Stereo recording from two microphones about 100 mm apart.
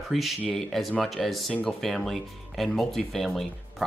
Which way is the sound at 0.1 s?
Centre (ahead or behind).